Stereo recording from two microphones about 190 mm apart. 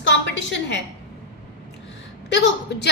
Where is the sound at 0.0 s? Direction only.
70° left (ahead or behind).